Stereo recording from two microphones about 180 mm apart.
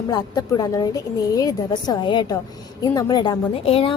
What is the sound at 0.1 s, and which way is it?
A woman's voice, 20° left (ahead or behind).